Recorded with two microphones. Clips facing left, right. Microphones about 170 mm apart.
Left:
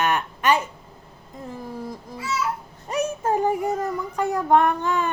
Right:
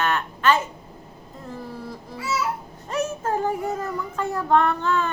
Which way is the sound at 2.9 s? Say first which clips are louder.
Left 2 dB; 15° left (ahead or behind).